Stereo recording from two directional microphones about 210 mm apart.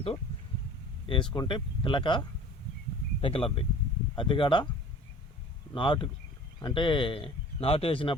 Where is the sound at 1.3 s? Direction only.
20° left (ahead or behind).